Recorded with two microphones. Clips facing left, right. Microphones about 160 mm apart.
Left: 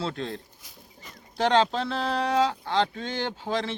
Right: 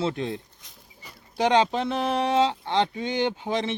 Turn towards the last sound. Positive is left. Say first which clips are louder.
# right 3 dB
turn(degrees=-20)  # may be behind; listen again after turning